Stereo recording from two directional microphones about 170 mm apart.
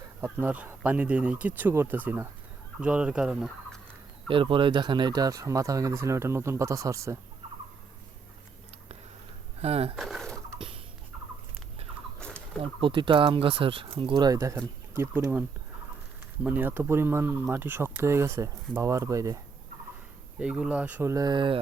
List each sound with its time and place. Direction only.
0.2 s speech: 10° right (ahead or behind)
4.3 s speech: 30° right (ahead or behind)
9.6 s speech: 35° right (ahead or behind)
9.9 s pigeon: centre (ahead or behind)
12.8 s speech: 30° right (ahead or behind)
20.4 s speech: 5° right (ahead or behind); by 21.6 s 30° right (ahead or behind)